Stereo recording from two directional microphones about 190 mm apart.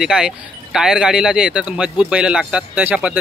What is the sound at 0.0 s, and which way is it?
Speech, 5° right (ahead or behind).